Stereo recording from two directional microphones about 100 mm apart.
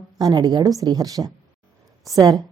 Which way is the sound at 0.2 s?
40° right (ahead or behind).